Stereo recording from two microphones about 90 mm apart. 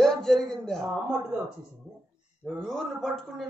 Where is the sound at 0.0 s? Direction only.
5° left (ahead or behind).